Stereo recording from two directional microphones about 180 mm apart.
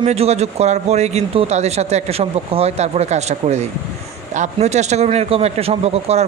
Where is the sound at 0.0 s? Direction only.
35° right (ahead or behind).